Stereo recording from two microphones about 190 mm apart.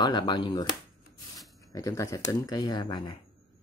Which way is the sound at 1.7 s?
15° left (ahead or behind).